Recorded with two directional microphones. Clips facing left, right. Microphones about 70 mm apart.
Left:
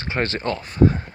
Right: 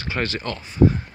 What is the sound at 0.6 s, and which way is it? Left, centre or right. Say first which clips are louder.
Speech: right 1 dB; left.